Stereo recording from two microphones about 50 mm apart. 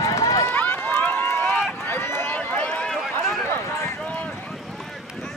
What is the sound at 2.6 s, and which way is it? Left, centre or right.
Run, left.